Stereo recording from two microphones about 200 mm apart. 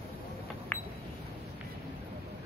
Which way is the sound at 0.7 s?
10° left (ahead or behind).